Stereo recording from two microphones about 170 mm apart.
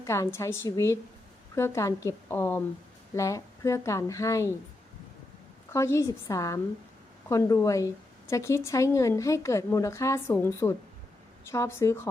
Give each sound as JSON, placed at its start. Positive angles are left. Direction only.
{"t": 0.0, "sound": "a woman's voice", "side_deg": 15}
{"t": 5.7, "sound": "a woman's voice", "side_deg": 15}